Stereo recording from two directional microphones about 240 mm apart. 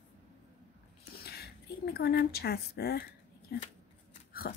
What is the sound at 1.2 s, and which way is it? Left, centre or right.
Speech, left.